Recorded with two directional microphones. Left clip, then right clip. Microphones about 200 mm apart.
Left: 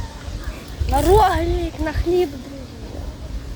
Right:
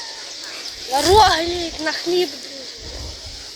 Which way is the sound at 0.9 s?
10° right (ahead or behind).